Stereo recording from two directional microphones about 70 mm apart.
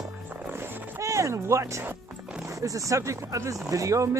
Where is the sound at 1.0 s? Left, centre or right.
Right.